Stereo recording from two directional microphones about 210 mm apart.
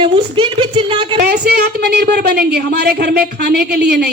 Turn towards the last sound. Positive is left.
turn(degrees=-50)  # may be behind; listen again after turning